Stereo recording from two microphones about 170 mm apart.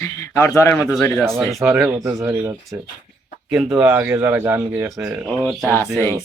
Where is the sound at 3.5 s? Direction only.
5° right (ahead or behind).